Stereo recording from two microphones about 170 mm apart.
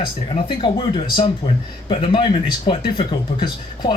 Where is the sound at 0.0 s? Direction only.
30° left (ahead or behind).